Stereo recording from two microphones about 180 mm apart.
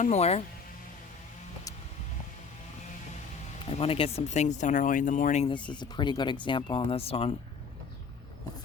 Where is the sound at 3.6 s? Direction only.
35° left (ahead or behind).